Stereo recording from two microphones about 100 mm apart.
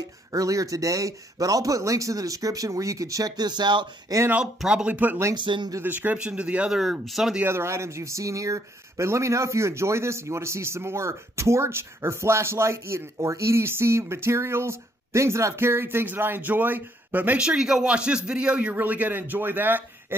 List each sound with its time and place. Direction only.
0.3 s speech: 35° right (ahead or behind)
4.6 s speech: 5° right (ahead or behind)
5.3 s a man's voice: 50° right (ahead or behind)
5.8 s speech: 15° right (ahead or behind)
7.4 s speech: 25° right (ahead or behind)